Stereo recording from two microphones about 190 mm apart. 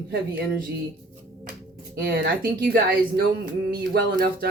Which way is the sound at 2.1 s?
55° right (ahead or behind).